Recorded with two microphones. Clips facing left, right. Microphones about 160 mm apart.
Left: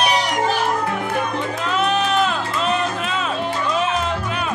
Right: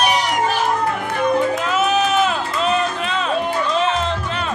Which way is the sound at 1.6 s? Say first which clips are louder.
Right 2 dB; 5° right (ahead or behind).